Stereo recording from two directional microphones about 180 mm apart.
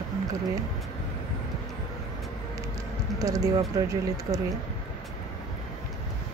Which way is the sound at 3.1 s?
20° right (ahead or behind).